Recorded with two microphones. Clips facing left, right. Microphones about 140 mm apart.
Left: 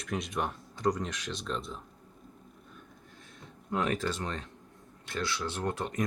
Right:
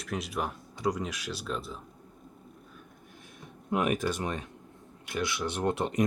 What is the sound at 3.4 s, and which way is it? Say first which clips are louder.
Speech: right 3 dB; 15° right (ahead or behind).